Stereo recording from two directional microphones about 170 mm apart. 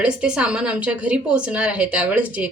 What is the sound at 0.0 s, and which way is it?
A woman's voice, 5° right (ahead or behind).